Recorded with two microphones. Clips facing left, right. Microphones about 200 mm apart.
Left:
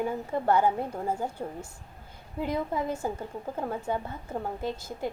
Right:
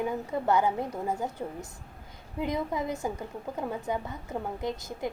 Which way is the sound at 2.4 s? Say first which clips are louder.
Left 1 dB; 15° right (ahead or behind).